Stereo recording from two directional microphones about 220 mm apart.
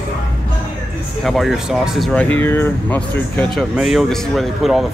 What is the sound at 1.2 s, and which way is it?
Speech, centre (ahead or behind).